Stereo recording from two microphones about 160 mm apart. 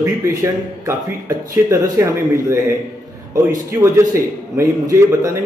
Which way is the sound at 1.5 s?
20° right (ahead or behind).